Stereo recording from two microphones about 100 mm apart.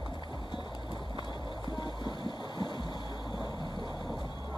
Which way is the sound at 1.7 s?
50° left (ahead or behind).